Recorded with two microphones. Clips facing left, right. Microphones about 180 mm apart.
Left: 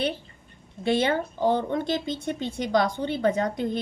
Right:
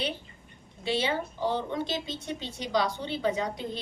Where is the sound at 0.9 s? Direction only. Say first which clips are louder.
Left 6 dB; 50° left (ahead or behind).